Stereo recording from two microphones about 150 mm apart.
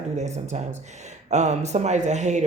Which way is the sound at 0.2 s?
50° right (ahead or behind).